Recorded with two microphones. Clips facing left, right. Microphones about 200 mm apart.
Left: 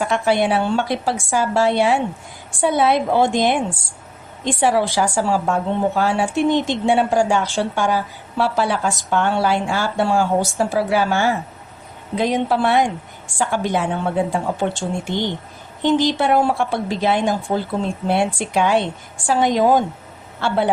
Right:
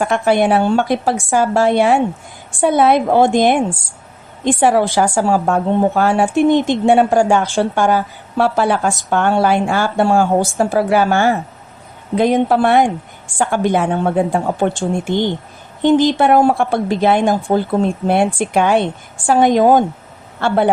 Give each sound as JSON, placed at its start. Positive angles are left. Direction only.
{"t": 0.0, "sound": "a woman's voice", "side_deg": -50}